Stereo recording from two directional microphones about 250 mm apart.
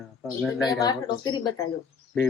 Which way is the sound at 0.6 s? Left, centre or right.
Centre.